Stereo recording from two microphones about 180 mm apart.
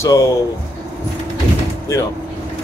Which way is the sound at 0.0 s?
15° left (ahead or behind).